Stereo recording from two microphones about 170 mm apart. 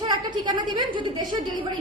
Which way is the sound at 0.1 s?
25° right (ahead or behind).